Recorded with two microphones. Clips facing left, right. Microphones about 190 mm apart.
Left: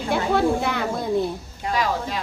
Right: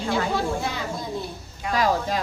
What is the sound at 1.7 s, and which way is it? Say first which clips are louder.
Speech: right 2 dB; 40° right (ahead or behind).